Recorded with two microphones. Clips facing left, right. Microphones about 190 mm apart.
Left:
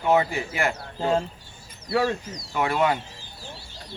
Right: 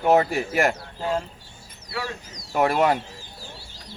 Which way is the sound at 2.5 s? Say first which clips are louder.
Right 3 dB; 40° right (ahead or behind).